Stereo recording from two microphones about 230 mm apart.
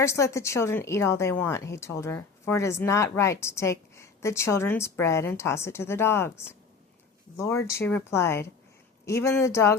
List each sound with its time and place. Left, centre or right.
0.0 s speech: centre
7.3 s speech: centre